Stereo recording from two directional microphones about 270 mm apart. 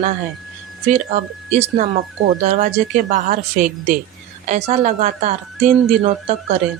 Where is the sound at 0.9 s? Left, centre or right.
Right.